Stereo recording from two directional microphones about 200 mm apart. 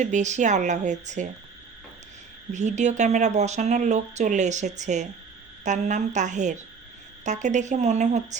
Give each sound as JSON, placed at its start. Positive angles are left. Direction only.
{"t": 0.0, "sound": "speech", "side_deg": -35}
{"t": 2.5, "sound": "speech", "side_deg": -35}